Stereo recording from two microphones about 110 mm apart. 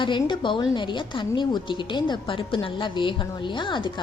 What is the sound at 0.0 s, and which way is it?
A woman's voice, 45° left (ahead or behind).